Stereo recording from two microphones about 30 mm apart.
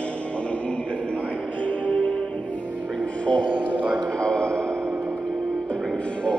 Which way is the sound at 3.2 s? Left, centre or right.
Left.